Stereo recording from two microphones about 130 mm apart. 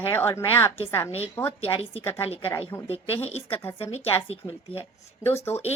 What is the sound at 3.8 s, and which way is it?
A woman's voice, 50° left (ahead or behind).